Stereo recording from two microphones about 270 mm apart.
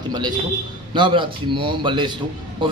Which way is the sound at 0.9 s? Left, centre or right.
Centre.